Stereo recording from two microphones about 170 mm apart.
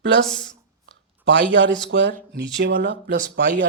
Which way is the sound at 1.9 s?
90° right.